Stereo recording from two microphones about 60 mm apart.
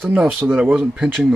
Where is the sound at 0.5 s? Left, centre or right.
Right.